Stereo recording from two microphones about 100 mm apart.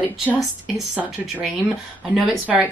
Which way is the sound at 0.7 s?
Centre (ahead or behind).